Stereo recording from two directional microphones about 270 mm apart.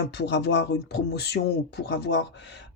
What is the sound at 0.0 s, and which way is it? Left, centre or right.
Speech, left.